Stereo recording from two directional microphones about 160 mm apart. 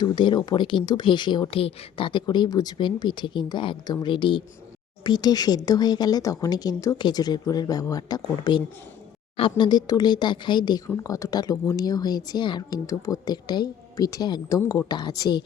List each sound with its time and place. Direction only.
0.0 s speech: 30° left (ahead or behind)